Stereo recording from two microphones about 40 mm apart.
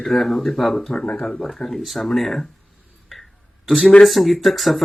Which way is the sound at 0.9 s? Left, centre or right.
Centre.